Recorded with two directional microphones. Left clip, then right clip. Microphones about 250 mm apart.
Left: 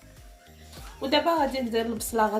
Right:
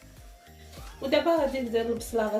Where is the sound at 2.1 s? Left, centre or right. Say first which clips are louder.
Left 5 dB; left.